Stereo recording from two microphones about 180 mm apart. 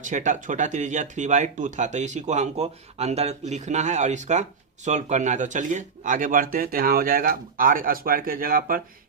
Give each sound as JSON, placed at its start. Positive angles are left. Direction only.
{"t": 0.0, "sound": "speech", "side_deg": -45}